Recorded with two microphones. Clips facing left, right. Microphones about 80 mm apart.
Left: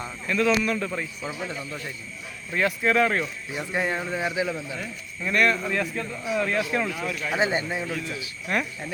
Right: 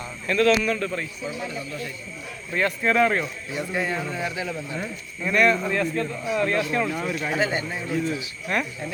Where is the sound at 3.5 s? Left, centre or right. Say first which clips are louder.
Right 1 dB; centre.